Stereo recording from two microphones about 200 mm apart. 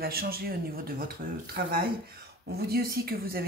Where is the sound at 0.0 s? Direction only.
50° right (ahead or behind).